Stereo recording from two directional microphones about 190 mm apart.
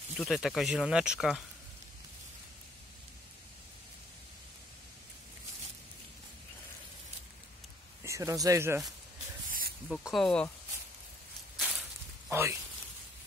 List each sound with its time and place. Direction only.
0.2 s speech: centre (ahead or behind)
8.0 s speech: 15° right (ahead or behind)
9.5 s snake: 50° right (ahead or behind)
9.8 s speech: centre (ahead or behind)
11.5 s walk: centre (ahead or behind)
12.3 s speech: 15° right (ahead or behind)